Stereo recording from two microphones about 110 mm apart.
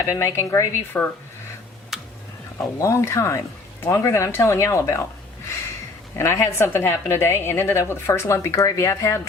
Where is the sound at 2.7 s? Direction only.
30° left (ahead or behind).